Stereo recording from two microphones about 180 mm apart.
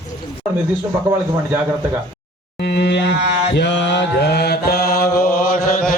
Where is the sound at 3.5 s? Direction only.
75° left (ahead or behind); by 5.0 s 60° left (ahead or behind).